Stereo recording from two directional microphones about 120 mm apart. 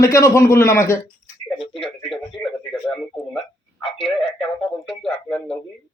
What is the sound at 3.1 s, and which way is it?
Speech, centre (ahead or behind).